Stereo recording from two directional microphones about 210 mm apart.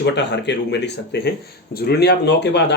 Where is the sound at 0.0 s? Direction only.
55° left (ahead or behind).